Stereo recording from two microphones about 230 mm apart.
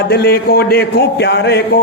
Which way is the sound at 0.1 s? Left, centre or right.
Left.